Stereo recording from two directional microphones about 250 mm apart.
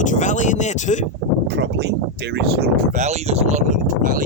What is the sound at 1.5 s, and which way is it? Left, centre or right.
Speech, right.